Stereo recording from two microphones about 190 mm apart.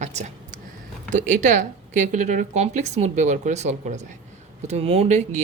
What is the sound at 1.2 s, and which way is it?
Speech, 40° right (ahead or behind).